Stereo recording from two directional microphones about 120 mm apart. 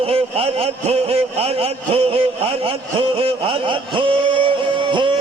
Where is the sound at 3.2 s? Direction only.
50° right (ahead or behind).